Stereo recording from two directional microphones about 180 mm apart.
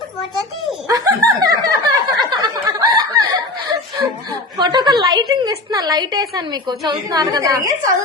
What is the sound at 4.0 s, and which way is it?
A woman's voice, 20° right (ahead or behind).